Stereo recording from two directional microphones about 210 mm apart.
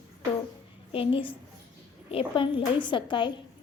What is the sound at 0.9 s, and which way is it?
A woman's voice, 25° left (ahead or behind).